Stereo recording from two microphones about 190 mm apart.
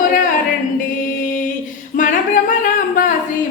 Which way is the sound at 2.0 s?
45° left (ahead or behind).